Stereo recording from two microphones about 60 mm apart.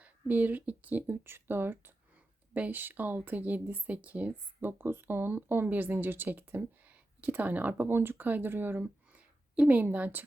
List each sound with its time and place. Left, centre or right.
0.0 s speech: right
4.6 s speech: right
8.8 s a sound: right